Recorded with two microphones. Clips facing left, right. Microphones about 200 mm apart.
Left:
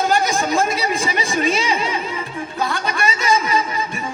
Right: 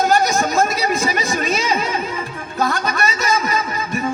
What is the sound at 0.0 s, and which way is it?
Chatter, 40° right (ahead or behind).